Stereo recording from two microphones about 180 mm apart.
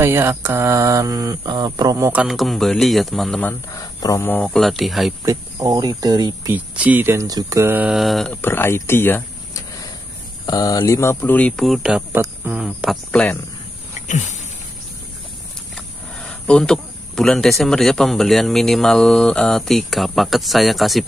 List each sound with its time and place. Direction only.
0.0 s speech: 15° right (ahead or behind)
2.2 s speech: centre (ahead or behind)
3.7 s speech: 20° left (ahead or behind); by 5.1 s centre (ahead or behind)
5.2 s speech: 20° right (ahead or behind)
6.5 s speech: 10° right (ahead or behind)
12.1 s speech: 10° right (ahead or behind)
13.1 s speech: 5° left (ahead or behind)
14.0 s a sound: 40° left (ahead or behind)
15.7 s speech: 5° left (ahead or behind)